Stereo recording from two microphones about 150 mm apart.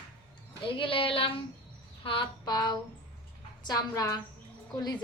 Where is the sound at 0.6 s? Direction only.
35° left (ahead or behind).